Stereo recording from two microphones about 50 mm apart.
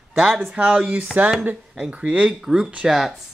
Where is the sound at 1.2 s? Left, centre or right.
Right.